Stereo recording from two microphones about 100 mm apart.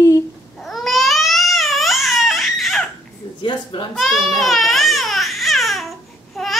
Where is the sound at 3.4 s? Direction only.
50° left (ahead or behind).